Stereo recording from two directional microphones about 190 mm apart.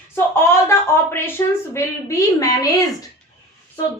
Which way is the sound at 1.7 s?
15° left (ahead or behind).